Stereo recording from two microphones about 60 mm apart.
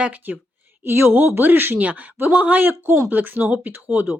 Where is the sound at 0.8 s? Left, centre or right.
Right.